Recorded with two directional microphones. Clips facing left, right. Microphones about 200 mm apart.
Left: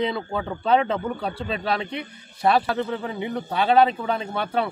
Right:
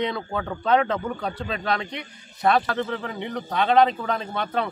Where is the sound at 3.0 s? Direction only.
10° left (ahead or behind).